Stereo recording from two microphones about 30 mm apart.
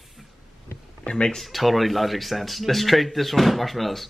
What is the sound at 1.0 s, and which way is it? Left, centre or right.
Speech, left.